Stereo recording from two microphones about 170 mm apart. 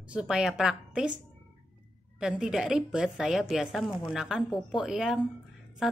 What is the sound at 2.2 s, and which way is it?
A woman's voice, 5° right (ahead or behind).